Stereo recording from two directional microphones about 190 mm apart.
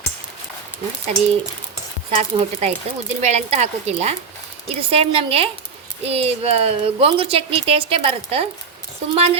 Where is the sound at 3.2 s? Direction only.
35° right (ahead or behind).